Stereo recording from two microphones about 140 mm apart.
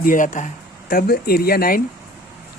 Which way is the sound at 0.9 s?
90° left.